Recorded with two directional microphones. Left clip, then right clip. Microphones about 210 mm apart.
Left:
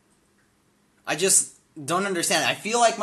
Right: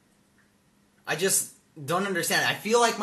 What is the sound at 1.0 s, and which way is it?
Speech, 35° left (ahead or behind).